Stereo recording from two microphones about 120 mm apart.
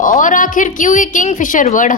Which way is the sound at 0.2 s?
90° left.